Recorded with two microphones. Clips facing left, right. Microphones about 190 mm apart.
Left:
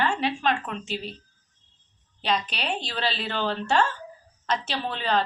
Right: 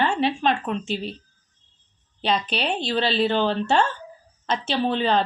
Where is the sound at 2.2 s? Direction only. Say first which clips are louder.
Right 4 dB; 30° right (ahead or behind).